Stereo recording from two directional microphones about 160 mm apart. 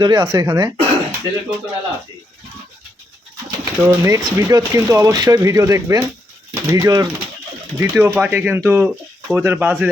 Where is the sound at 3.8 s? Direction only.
15° right (ahead or behind).